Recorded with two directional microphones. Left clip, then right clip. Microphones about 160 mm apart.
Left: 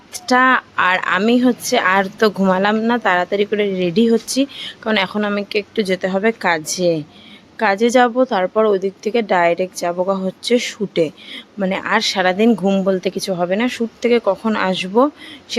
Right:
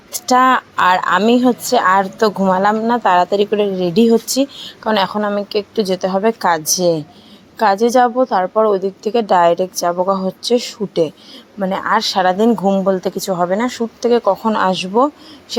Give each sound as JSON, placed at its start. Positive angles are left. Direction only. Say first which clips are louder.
{"t": 0.1, "sound": "a woman's voice", "louder": "right 2 dB", "side_deg": -5}
{"t": 2.0, "sound": "a woman's voice", "louder": "right 1 dB", "side_deg": 15}
{"t": 3.0, "sound": "a woman's voice", "louder": "right 3 dB", "side_deg": 0}
{"t": 7.9, "sound": "a woman's voice", "louder": "right 1 dB", "side_deg": 15}
{"t": 10.5, "sound": "a woman's voice", "louder": "even", "side_deg": 15}
{"t": 11.9, "sound": "a woman's voice", "louder": "right 1 dB", "side_deg": 5}
{"t": 12.5, "sound": "a woman's voice", "louder": "right 2 dB", "side_deg": 20}